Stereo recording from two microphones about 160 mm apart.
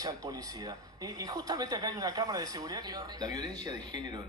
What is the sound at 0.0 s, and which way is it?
Speech, 25° right (ahead or behind).